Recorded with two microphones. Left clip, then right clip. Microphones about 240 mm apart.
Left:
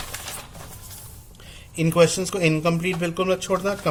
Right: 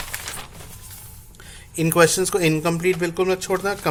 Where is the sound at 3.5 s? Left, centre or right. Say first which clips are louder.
Even; right.